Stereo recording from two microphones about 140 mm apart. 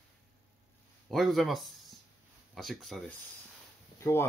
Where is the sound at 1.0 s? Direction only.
Centre (ahead or behind).